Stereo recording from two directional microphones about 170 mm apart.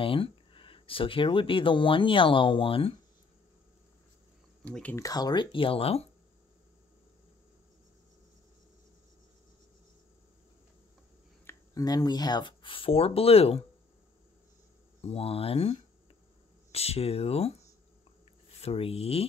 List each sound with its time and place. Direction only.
0.0 s speech: 30° left (ahead or behind)
4.9 s speech: 20° left (ahead or behind)
11.4 s speech: 20° left (ahead or behind)
15.0 s speech: 35° left (ahead or behind)
18.6 s speech: 35° left (ahead or behind)